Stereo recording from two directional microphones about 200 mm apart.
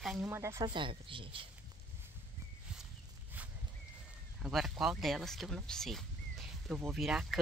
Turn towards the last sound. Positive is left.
turn(degrees=0)  # may be behind; listen again after turning